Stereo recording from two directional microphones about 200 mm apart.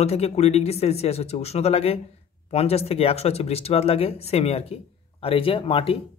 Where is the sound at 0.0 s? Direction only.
30° left (ahead or behind).